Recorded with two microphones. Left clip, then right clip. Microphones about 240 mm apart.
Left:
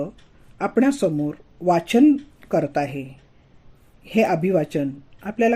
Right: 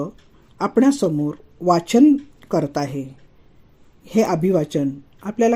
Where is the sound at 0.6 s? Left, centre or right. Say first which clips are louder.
Right 2 dB; centre.